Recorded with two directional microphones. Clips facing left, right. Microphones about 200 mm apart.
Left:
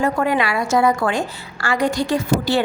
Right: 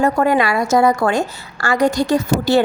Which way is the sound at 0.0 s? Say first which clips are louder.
Right 4 dB; 40° right (ahead or behind).